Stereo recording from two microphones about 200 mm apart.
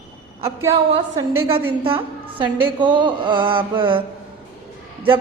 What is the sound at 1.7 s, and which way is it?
Speech, 25° right (ahead or behind).